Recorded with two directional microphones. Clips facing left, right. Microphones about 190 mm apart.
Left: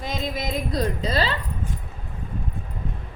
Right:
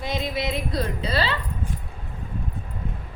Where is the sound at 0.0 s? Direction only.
45° left (ahead or behind).